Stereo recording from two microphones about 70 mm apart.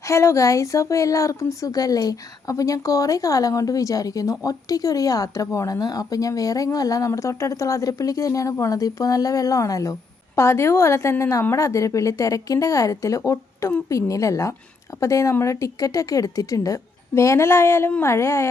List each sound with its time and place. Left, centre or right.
0.0 s speech: left
10.3 s a woman's voice: left